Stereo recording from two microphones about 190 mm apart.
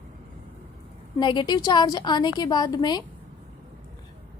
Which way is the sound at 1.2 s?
25° left (ahead or behind).